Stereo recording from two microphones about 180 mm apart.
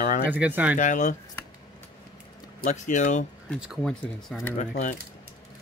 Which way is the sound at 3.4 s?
5° right (ahead or behind).